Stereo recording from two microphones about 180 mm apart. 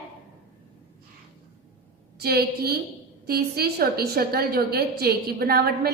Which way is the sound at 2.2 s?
60° right (ahead or behind).